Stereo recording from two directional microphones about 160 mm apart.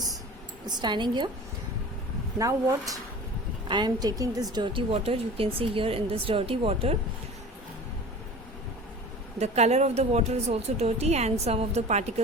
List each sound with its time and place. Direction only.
0.7 s a woman's voice: 25° right (ahead or behind)
2.4 s a woman's voice: 20° right (ahead or behind); by 6.9 s 40° right (ahead or behind)
9.4 s a woman's voice: 45° right (ahead or behind)